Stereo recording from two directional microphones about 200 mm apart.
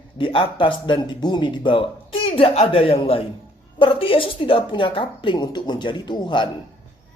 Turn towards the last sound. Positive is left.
turn(degrees=25)  # may be behind; listen again after turning